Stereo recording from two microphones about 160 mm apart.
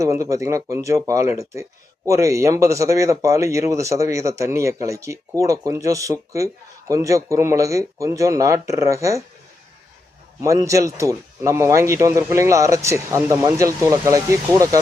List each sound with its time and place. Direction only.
0.0 s speech: 20° right (ahead or behind)
10.4 s speech: 20° right (ahead or behind)